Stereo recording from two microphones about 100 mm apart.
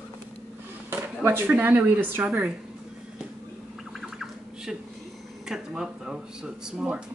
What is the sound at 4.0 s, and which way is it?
Bird, 5° right (ahead or behind).